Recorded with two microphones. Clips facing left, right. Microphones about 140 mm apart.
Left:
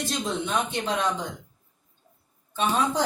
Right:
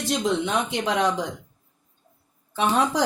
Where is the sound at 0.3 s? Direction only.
90° right.